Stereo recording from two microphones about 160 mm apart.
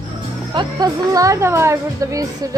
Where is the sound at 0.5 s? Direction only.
25° right (ahead or behind).